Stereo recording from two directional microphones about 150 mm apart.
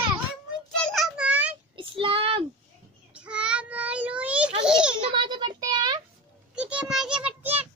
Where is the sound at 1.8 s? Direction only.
35° right (ahead or behind).